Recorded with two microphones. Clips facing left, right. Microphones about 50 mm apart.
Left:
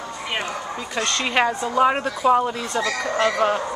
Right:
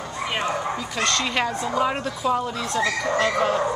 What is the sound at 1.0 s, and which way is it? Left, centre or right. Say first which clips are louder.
Speech: left 3 dB; centre.